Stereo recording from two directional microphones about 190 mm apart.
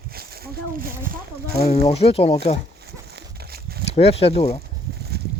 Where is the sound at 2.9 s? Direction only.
60° right (ahead or behind).